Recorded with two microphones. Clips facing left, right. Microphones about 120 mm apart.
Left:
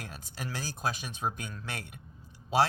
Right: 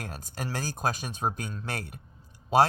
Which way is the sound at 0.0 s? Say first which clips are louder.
Right 4 dB; 45° right (ahead or behind).